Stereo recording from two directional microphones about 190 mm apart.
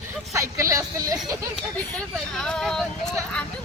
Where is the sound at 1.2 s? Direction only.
Centre (ahead or behind).